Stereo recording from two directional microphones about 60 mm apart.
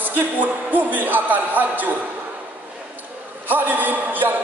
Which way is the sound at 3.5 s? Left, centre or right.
Right.